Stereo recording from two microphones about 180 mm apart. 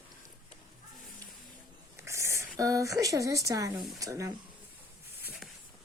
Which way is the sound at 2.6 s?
20° right (ahead or behind).